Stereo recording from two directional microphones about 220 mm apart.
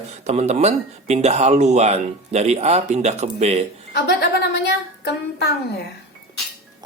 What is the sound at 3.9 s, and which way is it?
Speech, 50° left (ahead or behind).